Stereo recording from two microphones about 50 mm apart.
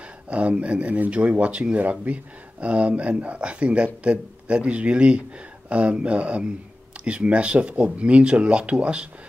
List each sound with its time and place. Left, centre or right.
0.3 s speech: right